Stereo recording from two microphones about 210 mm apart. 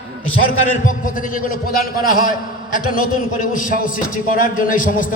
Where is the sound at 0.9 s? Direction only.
40° left (ahead or behind).